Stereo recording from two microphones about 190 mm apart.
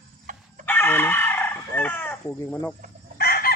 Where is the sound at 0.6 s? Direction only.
10° left (ahead or behind).